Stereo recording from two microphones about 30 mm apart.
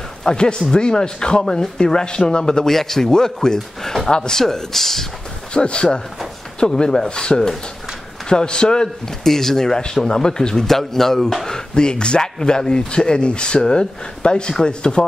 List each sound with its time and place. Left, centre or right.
0.2 s speech: left
2.6 s a man's voice: centre
5.5 s speech: left
9.2 s a man's voice: centre
10.7 s a man's voice: centre
11.4 s speech: left